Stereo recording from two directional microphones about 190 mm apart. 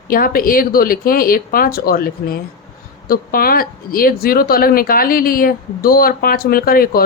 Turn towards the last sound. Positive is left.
turn(degrees=50)  # may be behind; listen again after turning